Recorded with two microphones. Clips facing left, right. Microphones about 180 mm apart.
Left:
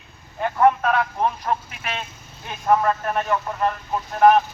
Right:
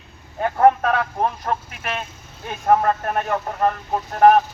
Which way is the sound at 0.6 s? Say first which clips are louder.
Right 2 dB; 40° right (ahead or behind).